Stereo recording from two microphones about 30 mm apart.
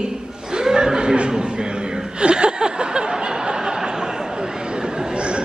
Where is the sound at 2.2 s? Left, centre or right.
Right.